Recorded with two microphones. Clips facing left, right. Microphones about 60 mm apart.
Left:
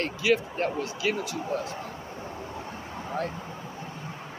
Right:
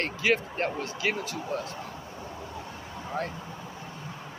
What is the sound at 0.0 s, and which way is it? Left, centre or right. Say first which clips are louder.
Speech: left 1 dB; right.